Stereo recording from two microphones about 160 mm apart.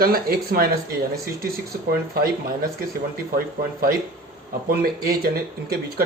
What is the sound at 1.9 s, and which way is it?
Speech, 70° right (ahead or behind).